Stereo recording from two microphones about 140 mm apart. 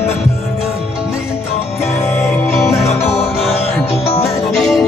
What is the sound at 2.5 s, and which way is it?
Music, centre (ahead or behind).